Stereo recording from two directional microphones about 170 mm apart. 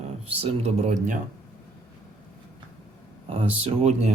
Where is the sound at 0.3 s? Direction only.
35° right (ahead or behind).